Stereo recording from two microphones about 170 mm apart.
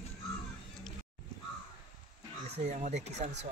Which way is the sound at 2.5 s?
45° right (ahead or behind).